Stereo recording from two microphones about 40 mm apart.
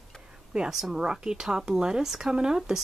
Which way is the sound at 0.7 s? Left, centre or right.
Centre.